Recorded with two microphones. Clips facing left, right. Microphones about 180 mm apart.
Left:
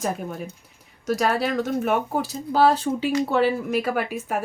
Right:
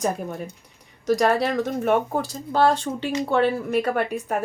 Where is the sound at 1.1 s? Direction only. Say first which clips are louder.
Right 2 dB; centre (ahead or behind).